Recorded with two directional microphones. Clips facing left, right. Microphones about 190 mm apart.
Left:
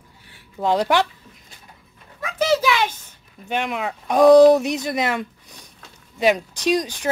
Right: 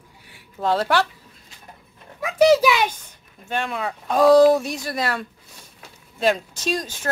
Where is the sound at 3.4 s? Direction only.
15° left (ahead or behind).